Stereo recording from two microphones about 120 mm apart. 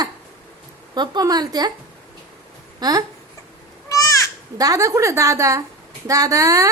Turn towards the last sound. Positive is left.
turn(degrees=-30)  # may be behind; listen again after turning